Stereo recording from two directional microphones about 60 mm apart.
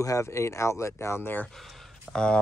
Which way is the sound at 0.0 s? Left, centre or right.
Left.